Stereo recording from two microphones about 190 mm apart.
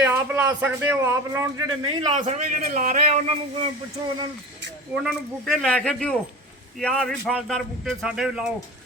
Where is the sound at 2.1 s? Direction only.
40° right (ahead or behind).